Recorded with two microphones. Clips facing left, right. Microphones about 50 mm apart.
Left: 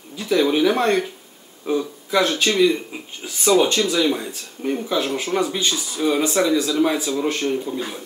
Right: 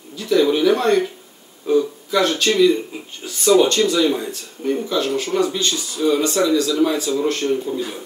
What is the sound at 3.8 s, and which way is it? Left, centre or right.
Speech, centre.